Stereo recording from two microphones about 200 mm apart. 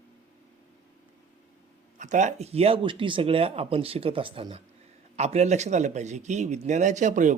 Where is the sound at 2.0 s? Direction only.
35° right (ahead or behind).